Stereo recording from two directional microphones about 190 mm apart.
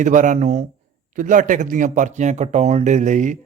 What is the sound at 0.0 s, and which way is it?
Speech, 40° right (ahead or behind).